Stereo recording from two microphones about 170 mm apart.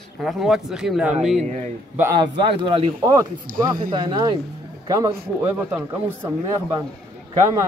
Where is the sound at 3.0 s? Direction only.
15° right (ahead or behind).